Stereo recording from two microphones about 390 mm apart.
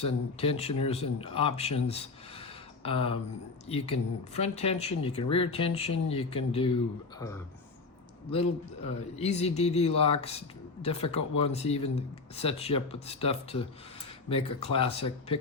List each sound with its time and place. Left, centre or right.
0.0 s speech: centre
9.0 s speech: centre